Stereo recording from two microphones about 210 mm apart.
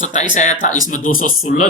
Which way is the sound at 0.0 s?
35° left (ahead or behind).